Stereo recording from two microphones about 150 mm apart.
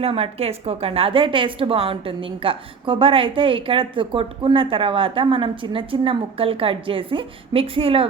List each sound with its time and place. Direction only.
0.0 s a woman's voice: 40° right (ahead or behind)